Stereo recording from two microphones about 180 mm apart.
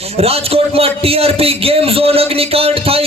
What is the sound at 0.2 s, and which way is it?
A man's voice, 35° right (ahead or behind).